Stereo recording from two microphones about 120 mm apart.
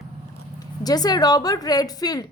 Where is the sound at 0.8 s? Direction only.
35° left (ahead or behind).